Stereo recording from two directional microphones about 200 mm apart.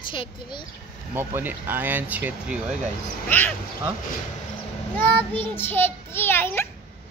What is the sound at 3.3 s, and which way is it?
Speech, 10° left (ahead or behind).